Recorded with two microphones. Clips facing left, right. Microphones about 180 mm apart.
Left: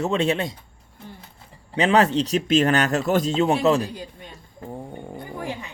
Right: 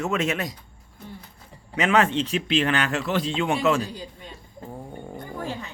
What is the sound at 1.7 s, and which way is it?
Speech, 35° left (ahead or behind).